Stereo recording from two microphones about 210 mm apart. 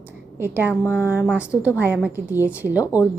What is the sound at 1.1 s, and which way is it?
A woman's voice, 5° right (ahead or behind).